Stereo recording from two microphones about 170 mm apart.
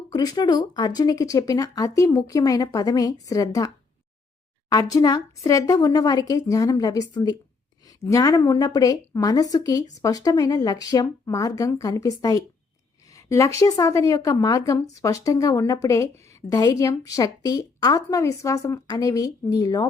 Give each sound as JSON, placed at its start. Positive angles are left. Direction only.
{"t": 0.1, "sound": "speech", "side_deg": 25}
{"t": 4.7, "sound": "speech", "side_deg": 20}